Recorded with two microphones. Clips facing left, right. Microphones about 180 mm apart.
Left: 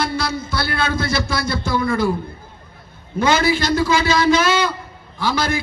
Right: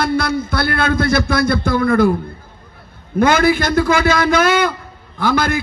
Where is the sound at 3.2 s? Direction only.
55° right (ahead or behind).